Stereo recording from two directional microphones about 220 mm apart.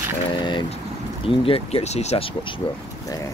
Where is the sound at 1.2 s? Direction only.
25° left (ahead or behind).